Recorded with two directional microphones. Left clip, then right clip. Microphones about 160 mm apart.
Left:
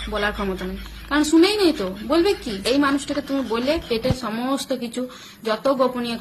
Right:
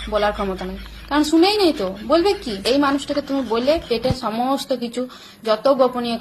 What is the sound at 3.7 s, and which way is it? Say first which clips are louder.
Speech: right 4 dB; 20° left (ahead or behind).